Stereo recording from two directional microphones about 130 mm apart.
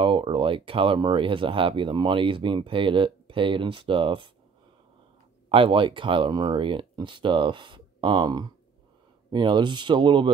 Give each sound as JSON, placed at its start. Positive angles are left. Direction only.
{"t": 0.0, "sound": "speech", "side_deg": -40}
{"t": 5.5, "sound": "speech", "side_deg": -45}